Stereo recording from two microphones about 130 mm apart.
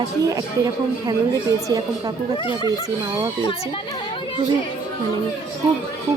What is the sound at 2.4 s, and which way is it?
Speech, 40° left (ahead or behind).